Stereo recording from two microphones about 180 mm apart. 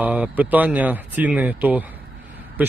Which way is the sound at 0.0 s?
10° right (ahead or behind).